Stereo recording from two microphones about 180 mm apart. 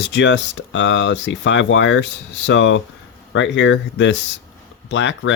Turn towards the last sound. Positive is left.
turn(degrees=80)